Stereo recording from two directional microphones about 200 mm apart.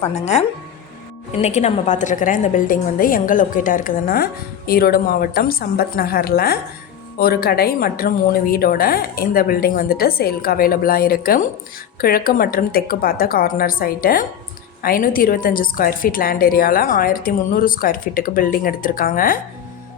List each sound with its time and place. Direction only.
1.4 s a woman's voice: 35° left (ahead or behind)